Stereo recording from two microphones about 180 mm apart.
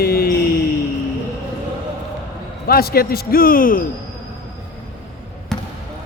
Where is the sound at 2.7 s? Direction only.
55° left (ahead or behind).